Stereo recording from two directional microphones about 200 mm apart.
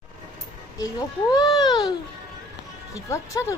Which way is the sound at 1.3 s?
20° left (ahead or behind).